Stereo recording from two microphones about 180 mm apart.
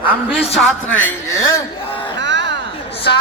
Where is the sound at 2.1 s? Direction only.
80° right.